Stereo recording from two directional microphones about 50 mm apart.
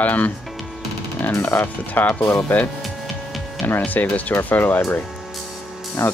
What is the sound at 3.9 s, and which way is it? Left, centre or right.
Speech, left.